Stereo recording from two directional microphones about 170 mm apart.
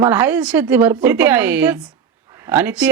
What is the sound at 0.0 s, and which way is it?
Speech, 10° right (ahead or behind).